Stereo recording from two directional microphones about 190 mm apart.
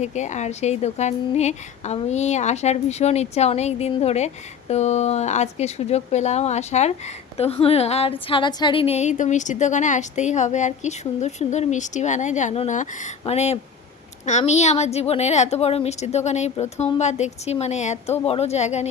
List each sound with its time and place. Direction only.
0.0 s speech: 40° left (ahead or behind)